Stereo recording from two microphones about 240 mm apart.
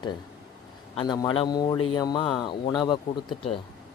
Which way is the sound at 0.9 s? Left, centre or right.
Centre.